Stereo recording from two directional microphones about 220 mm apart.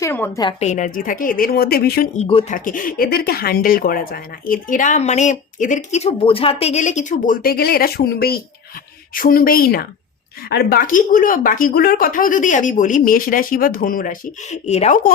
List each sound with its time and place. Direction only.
0.0 s a woman's voice: 10° left (ahead or behind)
0.6 s speech: 35° left (ahead or behind)
2.1 s speech: 30° left (ahead or behind)